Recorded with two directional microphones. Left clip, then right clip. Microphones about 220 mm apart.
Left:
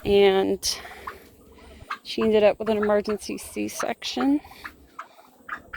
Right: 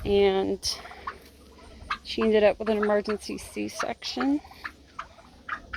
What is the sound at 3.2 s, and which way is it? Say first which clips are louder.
Speech: left 3 dB; 50° left (ahead or behind).